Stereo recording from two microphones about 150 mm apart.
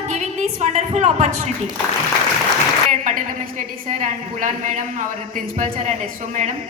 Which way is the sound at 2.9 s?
60° right (ahead or behind).